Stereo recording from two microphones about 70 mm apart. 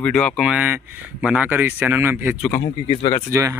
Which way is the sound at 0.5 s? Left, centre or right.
Right.